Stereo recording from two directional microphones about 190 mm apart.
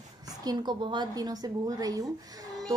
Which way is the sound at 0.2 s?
20° right (ahead or behind).